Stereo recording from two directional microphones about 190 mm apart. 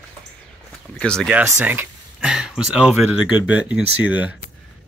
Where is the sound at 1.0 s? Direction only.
5° left (ahead or behind).